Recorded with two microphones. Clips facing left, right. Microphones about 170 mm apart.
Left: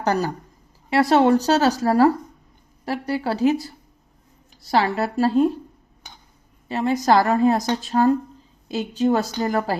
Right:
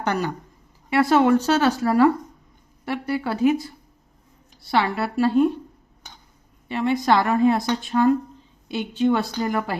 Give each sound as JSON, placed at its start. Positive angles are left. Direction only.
{"t": 0.0, "sound": "a woman's voice", "side_deg": 35}
{"t": 6.7, "sound": "a woman's voice", "side_deg": 35}